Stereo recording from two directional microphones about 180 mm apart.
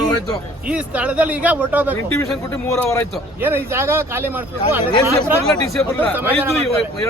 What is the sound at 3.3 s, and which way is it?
Speech, 10° right (ahead or behind).